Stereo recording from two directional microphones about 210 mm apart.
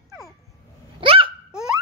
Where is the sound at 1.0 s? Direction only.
25° right (ahead or behind).